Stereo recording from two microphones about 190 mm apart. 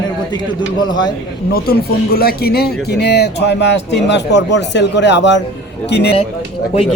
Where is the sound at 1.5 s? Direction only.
55° left (ahead or behind).